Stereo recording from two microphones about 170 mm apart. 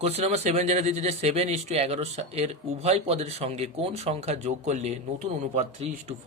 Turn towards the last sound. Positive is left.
turn(degrees=-45)  # may be behind; listen again after turning